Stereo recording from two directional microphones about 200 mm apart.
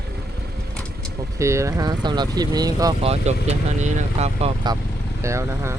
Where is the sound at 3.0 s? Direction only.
30° right (ahead or behind).